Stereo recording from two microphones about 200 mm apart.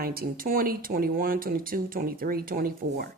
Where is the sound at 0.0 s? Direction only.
50° right (ahead or behind).